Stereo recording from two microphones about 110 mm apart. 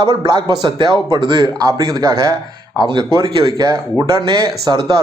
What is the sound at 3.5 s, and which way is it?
Speech, 35° right (ahead or behind).